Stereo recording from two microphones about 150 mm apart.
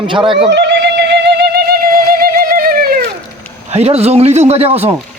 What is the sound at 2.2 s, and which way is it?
Music, 75° right (ahead or behind).